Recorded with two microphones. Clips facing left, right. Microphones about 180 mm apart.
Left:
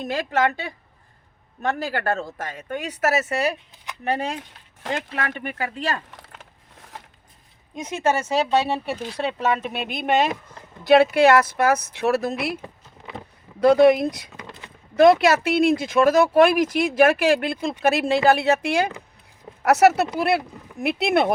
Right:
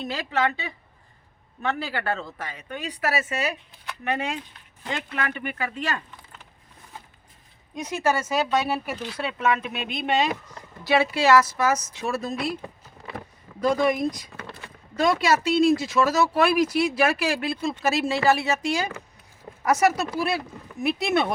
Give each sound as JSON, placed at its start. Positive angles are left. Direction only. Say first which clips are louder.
{"t": 0.0, "sound": "speech", "louder": "left 3 dB", "side_deg": 50}
{"t": 7.9, "sound": "speech", "louder": "left 2 dB", "side_deg": 25}
{"t": 9.7, "sound": "speech", "louder": "left 2 dB", "side_deg": 5}
{"t": 10.0, "sound": "speech", "louder": "left 3 dB", "side_deg": 55}
{"t": 13.6, "sound": "speech", "louder": "left 7 dB", "side_deg": 70}
{"t": 14.3, "sound": "a sound", "louder": "even", "side_deg": 15}
{"t": 15.2, "sound": "speech", "louder": "left 2 dB", "side_deg": 60}